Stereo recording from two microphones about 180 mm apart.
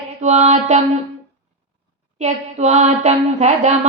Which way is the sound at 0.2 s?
40° right (ahead or behind).